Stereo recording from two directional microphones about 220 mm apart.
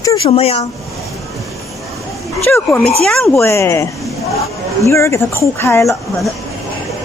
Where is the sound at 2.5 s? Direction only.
5° left (ahead or behind).